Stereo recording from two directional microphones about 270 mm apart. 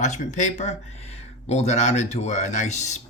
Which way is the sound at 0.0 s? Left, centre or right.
Left.